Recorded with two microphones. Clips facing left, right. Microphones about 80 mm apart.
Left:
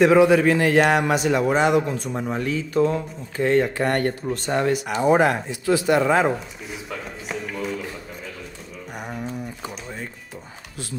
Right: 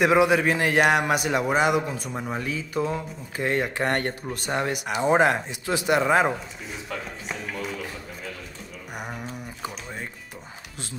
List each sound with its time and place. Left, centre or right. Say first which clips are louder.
0.0 s a man's voice: left 5 dB; centre
3.8 s speech: left 3 dB; right
4.3 s a man's voice: left 5 dB; centre
6.7 s speech: left 1 dB; centre
8.9 s a sound: left 4 dB; centre